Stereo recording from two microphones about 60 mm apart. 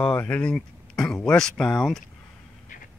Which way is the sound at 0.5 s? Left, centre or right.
Centre.